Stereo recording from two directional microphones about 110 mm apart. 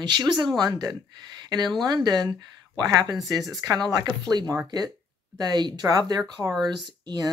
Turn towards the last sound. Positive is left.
turn(degrees=-35)  # may be behind; listen again after turning